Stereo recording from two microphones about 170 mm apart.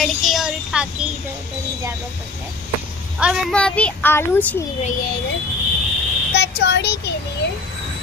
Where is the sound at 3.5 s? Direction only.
5° left (ahead or behind).